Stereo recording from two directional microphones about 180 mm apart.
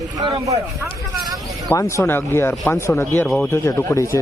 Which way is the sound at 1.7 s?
15° left (ahead or behind).